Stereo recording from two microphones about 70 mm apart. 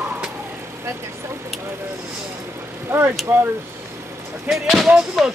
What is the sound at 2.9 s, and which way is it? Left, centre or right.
Speech, right.